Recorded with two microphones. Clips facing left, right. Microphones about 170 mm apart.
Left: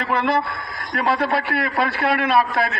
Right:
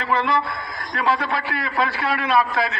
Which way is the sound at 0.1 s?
55° left (ahead or behind).